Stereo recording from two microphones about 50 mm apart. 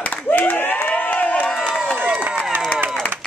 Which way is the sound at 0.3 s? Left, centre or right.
Left.